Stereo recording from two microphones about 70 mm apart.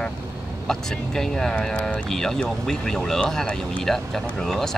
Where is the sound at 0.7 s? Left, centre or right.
Centre.